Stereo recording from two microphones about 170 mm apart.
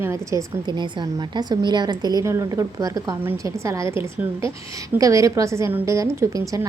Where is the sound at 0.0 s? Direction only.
15° right (ahead or behind).